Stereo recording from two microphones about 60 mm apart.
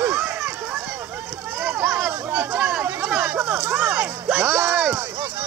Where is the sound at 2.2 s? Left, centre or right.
Right.